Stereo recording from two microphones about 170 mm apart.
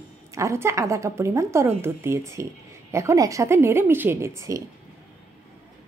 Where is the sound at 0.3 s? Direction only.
15° right (ahead or behind).